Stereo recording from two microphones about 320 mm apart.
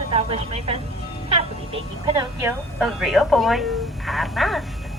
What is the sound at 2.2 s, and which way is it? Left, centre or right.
A woman's voice, centre.